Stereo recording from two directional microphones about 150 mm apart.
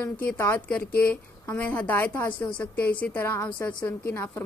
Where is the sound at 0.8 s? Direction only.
90° left.